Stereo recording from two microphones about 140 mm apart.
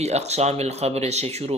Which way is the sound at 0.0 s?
50° right (ahead or behind).